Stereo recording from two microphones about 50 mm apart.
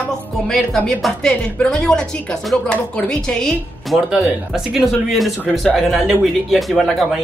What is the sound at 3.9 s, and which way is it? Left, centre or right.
Speech, centre.